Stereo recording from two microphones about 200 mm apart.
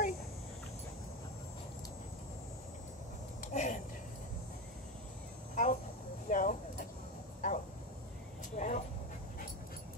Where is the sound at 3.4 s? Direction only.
35° left (ahead or behind).